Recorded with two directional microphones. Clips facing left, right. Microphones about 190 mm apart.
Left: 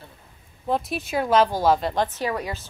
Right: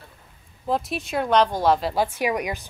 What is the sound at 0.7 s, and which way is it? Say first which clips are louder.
A woman's voice: even; centre (ahead or behind).